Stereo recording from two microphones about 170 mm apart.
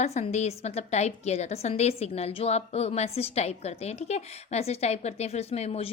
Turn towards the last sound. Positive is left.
turn(degrees=40)  # may be behind; listen again after turning